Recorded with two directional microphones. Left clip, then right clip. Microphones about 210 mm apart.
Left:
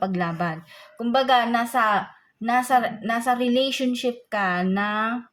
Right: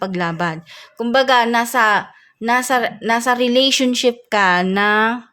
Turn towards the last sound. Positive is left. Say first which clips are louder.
# right 9 dB
turn(degrees=-45)  # may be behind; listen again after turning